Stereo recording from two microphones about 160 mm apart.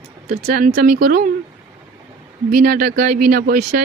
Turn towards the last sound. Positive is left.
turn(degrees=-65)  # may be behind; listen again after turning